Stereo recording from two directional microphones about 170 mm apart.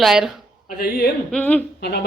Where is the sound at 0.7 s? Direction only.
60° left (ahead or behind).